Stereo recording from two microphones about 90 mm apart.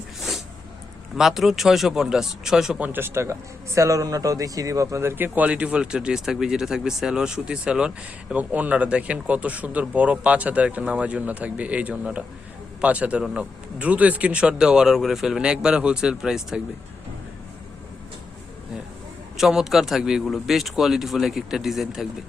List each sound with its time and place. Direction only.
0.2 s a sound: centre (ahead or behind)
1.1 s speech: 5° right (ahead or behind)
2.8 s speech: 25° right (ahead or behind)
3.8 s a man's voice: 40° right (ahead or behind); by 16.6 s 10° right (ahead or behind)
19.4 s speech: 5° right (ahead or behind)